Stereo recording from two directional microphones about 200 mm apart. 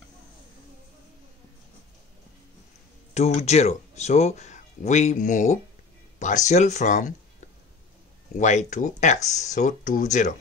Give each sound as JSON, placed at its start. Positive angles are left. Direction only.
{"t": 3.2, "sound": "speech", "side_deg": 35}